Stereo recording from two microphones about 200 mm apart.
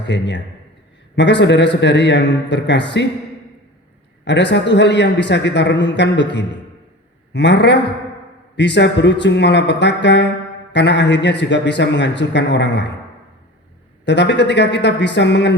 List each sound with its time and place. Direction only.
0.0 s speech: 60° left (ahead or behind)
4.3 s speech: 60° left (ahead or behind)
14.0 s speech: 60° left (ahead or behind)